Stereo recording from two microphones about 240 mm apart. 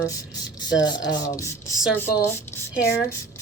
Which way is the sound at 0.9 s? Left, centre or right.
Centre.